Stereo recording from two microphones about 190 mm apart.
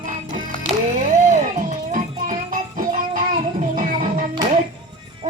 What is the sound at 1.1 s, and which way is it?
Music, 40° right (ahead or behind).